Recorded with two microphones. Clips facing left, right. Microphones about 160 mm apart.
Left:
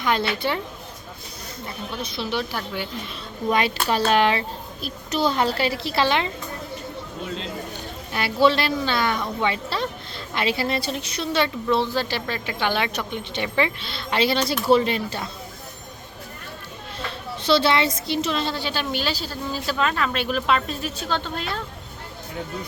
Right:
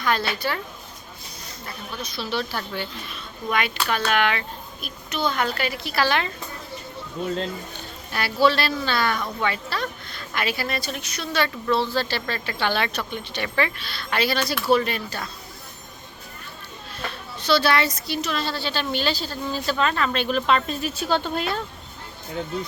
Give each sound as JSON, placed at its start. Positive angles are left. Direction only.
{"t": 0.0, "sound": "a woman's voice", "side_deg": 20}
{"t": 1.6, "sound": "a woman's voice", "side_deg": 25}
{"t": 3.5, "sound": "a child's voice", "side_deg": 35}
{"t": 8.1, "sound": "a woman's voice", "side_deg": 20}
{"t": 17.1, "sound": "a woman's voice", "side_deg": 25}